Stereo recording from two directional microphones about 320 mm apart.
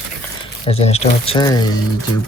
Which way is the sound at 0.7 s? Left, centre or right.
Centre.